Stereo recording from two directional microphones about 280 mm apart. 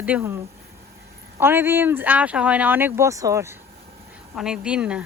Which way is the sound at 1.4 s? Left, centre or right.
Centre.